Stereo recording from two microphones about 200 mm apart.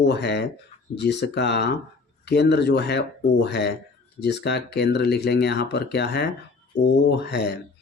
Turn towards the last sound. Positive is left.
turn(degrees=55)  # may be behind; listen again after turning